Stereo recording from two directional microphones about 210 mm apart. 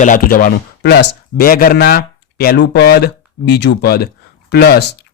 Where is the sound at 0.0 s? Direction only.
40° left (ahead or behind).